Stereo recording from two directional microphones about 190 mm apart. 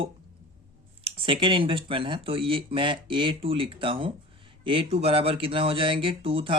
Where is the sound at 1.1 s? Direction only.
25° right (ahead or behind).